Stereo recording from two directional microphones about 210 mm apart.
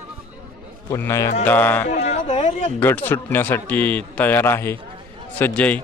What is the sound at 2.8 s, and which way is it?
A man's voice, 10° left (ahead or behind).